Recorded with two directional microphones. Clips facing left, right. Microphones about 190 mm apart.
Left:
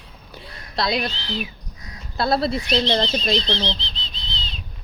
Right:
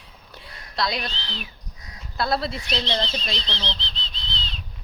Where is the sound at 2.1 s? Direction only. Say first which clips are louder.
Left 4 dB; 30° left (ahead or behind).